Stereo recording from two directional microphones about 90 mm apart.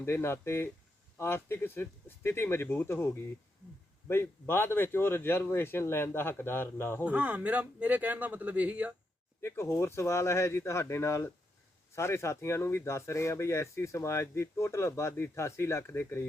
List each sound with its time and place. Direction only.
0.0 s speech: 25° left (ahead or behind)
4.1 s speech: 25° left (ahead or behind)
7.0 s speech: 20° right (ahead or behind)
9.4 s speech: 30° left (ahead or behind)